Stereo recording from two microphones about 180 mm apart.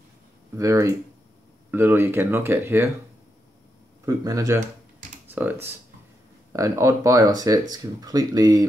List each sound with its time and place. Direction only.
0.6 s speech: 15° right (ahead or behind)
4.0 s speech: 20° right (ahead or behind)